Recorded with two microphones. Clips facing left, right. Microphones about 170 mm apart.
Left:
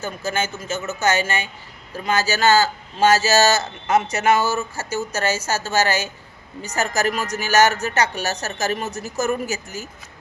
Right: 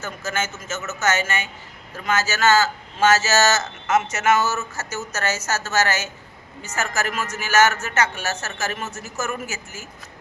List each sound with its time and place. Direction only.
0.0 s a man's voice: 30° left (ahead or behind)